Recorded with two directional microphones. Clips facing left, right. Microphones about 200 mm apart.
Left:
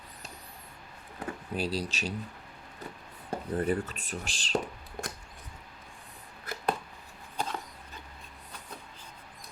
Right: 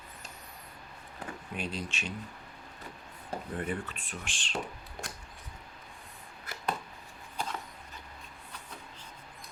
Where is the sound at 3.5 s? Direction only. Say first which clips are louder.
Left 7 dB; 40° left (ahead or behind).